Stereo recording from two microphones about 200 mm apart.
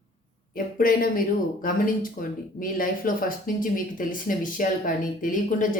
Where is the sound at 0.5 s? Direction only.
45° left (ahead or behind).